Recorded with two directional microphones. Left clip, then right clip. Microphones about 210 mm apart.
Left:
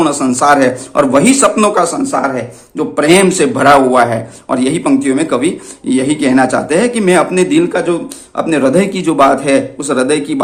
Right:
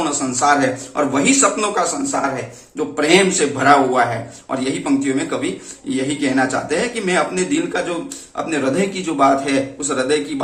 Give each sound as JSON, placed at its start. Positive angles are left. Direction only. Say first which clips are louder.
{"t": 0.0, "sound": "a man's voice", "louder": "left 7 dB", "side_deg": 50}